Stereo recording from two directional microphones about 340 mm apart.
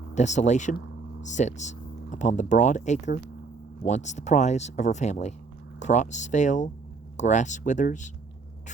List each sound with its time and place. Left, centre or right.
0.1 s speech: left